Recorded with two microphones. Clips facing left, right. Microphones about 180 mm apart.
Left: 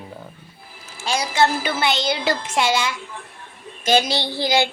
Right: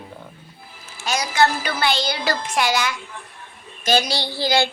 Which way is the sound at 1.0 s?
30° left (ahead or behind).